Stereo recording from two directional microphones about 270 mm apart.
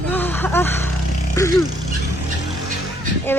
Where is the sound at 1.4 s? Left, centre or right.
Centre.